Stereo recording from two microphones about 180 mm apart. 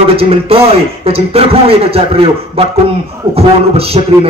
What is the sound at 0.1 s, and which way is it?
A man's voice, 30° right (ahead or behind).